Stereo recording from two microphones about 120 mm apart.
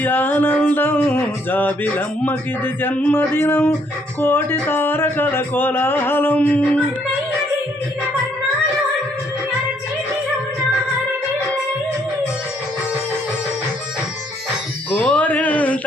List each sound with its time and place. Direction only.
0.0 s music: 15° left (ahead or behind)
2.8 s speech: 15° left (ahead or behind)
14.8 s a sound: 10° left (ahead or behind)